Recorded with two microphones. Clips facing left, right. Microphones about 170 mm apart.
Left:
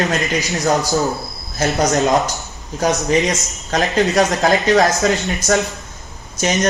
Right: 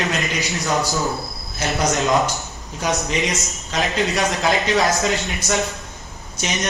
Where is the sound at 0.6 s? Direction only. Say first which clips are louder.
Left 5 dB; 40° left (ahead or behind).